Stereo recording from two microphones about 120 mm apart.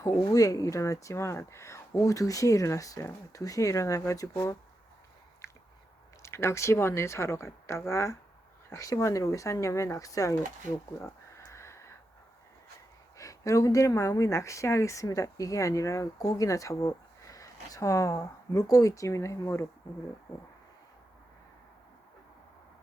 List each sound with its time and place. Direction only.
0.0 s speech: 30° left (ahead or behind)
6.2 s speech: 25° left (ahead or behind)
11.0 s a sound: 20° left (ahead or behind)
13.1 s speech: 25° left (ahead or behind)